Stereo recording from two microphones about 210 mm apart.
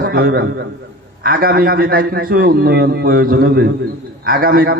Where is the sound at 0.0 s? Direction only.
45° right (ahead or behind).